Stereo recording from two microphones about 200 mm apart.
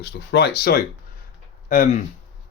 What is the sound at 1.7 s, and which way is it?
Speech, 45° left (ahead or behind).